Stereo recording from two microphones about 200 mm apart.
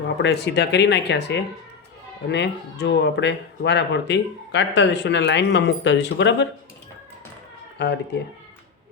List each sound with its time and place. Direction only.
0.2 s speech: 60° left (ahead or behind)
7.8 s speech: 60° left (ahead or behind)